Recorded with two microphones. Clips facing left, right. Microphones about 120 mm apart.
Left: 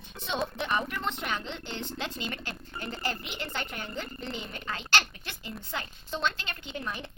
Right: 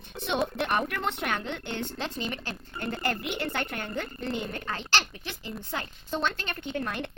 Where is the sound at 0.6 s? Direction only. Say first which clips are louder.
Right 3 dB; 60° right (ahead or behind).